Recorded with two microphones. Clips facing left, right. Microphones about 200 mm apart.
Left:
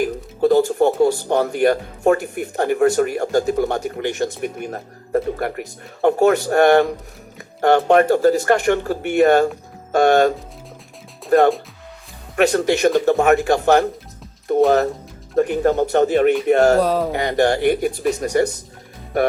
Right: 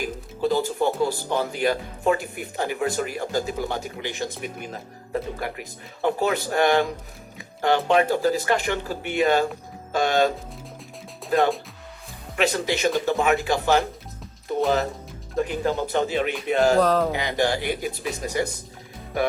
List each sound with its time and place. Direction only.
0.0 s speech: 55° left (ahead or behind)
16.8 s speech: 10° left (ahead or behind)
17.1 s speech: 55° left (ahead or behind)